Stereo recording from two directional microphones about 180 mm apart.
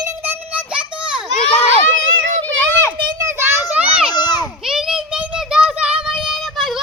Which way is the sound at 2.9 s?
20° right (ahead or behind).